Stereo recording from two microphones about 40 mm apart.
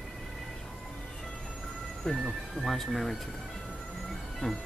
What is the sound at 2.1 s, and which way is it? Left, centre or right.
Speech, centre.